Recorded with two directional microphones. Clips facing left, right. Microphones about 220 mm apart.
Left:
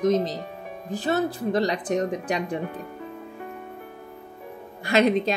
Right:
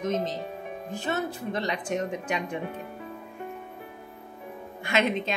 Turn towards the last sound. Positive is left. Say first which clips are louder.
# left 6 dB
turn(degrees=35)  # may be behind; listen again after turning